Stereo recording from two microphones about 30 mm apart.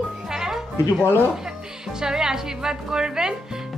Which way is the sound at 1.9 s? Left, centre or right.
Right.